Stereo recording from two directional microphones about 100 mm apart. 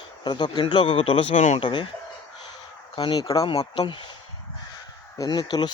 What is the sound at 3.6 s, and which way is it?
Speech, 50° left (ahead or behind).